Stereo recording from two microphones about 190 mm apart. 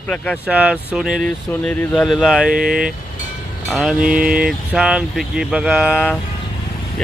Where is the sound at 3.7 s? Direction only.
Centre (ahead or behind).